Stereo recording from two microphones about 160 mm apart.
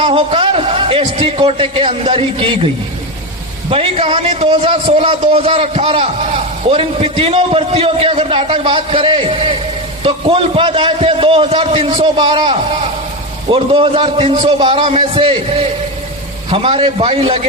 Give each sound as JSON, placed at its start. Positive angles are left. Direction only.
{"t": 0.0, "sound": "a man's voice", "side_deg": -35}
{"t": 3.7, "sound": "a man's voice", "side_deg": -35}
{"t": 16.5, "sound": "a man's voice", "side_deg": -35}